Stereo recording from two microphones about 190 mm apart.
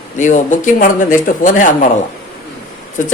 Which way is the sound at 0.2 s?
40° left (ahead or behind).